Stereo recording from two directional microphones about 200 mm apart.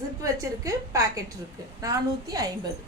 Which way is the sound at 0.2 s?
15° right (ahead or behind).